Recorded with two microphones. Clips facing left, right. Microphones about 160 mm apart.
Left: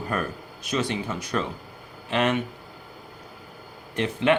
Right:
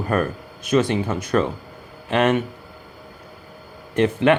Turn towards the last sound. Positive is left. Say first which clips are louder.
# right 4 dB
turn(degrees=-50)  # may be behind; listen again after turning